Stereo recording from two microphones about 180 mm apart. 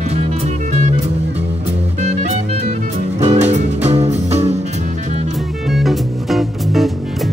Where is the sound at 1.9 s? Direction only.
40° right (ahead or behind).